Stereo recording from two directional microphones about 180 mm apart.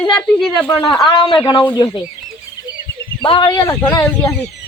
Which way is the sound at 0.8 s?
20° left (ahead or behind).